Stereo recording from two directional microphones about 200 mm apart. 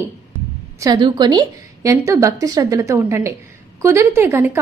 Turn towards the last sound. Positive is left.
turn(degrees=-10)  # may be behind; listen again after turning